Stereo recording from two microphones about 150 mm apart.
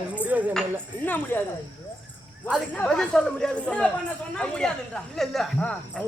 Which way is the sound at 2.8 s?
5° left (ahead or behind).